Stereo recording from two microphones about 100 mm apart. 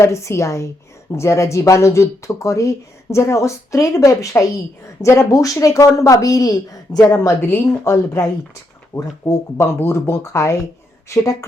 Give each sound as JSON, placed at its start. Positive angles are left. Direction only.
{"t": 0.0, "sound": "speech", "side_deg": 30}